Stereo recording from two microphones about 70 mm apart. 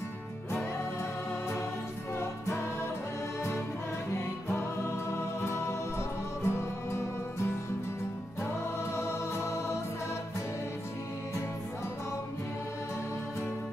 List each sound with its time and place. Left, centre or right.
2.1 s music: left
4.5 s music: left
8.9 s music: left